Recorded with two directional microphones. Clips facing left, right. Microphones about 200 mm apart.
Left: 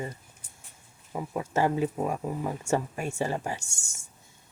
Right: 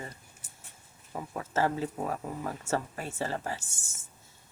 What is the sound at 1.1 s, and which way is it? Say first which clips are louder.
Speech: left 3 dB; 15° left (ahead or behind).